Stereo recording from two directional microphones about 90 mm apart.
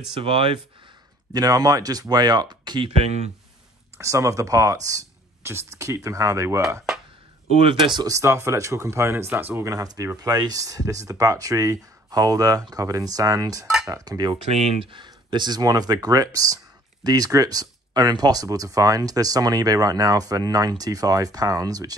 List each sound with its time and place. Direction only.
0.2 s speech: 90° right
1.3 s speech: 45° right (ahead or behind)
4.0 s speech: 35° right (ahead or behind)
7.6 s speech: 60° right (ahead or behind)
8.1 s speech: 35° right (ahead or behind)
9.7 s speech: 40° right (ahead or behind)
14.8 s speech: 65° right (ahead or behind); by 21.9 s 45° right (ahead or behind)